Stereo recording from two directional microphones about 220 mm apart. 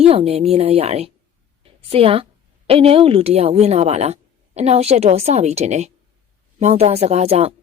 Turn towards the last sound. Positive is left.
turn(degrees=-30)  # may be behind; listen again after turning